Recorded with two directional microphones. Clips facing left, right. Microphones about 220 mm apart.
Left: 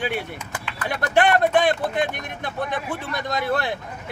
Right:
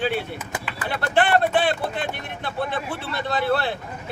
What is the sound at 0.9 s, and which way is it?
Speech, 15° left (ahead or behind).